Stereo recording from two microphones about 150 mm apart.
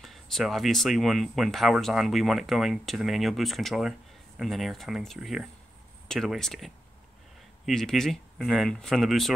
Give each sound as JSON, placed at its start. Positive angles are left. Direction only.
{"t": 0.0, "sound": "speech", "side_deg": 0}